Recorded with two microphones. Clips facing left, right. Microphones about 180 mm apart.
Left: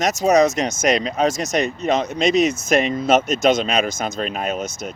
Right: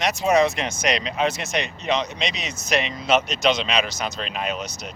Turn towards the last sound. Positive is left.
turn(degrees=50)  # may be behind; listen again after turning